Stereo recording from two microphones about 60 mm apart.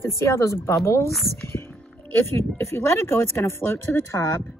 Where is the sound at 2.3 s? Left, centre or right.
Left.